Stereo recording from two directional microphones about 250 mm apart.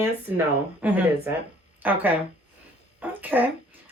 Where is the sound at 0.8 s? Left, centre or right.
Centre.